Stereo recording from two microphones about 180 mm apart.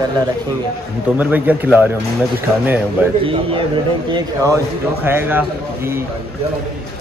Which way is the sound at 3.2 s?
30° right (ahead or behind).